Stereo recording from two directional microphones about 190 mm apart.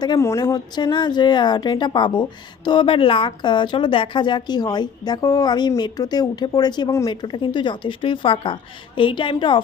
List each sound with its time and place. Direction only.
0.0 s speech: 20° left (ahead or behind)